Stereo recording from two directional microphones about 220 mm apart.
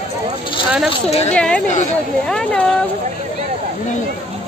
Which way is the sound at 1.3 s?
5° left (ahead or behind).